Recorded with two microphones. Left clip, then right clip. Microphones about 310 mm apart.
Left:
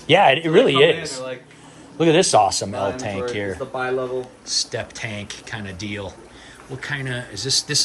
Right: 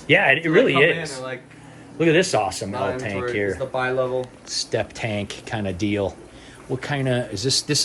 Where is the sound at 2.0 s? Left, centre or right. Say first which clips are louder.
Left 3 dB; centre.